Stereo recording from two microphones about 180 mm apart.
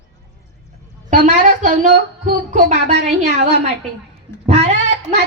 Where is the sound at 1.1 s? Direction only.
45° right (ahead or behind).